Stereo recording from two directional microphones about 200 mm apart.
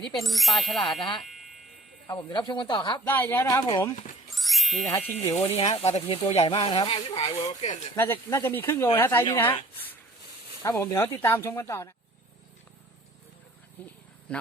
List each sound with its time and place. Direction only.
0.0 s music: centre (ahead or behind)
1.2 s a sound: centre (ahead or behind)
2.1 s speech: 25° left (ahead or behind)
3.1 s speech: 10° left (ahead or behind)
4.4 s music: centre (ahead or behind)
4.9 s speech: 10° left (ahead or behind)
5.5 s speech: 30° left (ahead or behind)
7.9 s speech: 10° left (ahead or behind)
10.6 s speech: 15° left (ahead or behind)
13.8 s speech: 10° left (ahead or behind)
14.3 s a sound: 5° left (ahead or behind)